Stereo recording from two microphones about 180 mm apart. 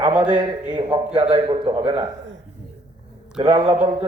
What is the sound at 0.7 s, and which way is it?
A man's voice, 25° right (ahead or behind).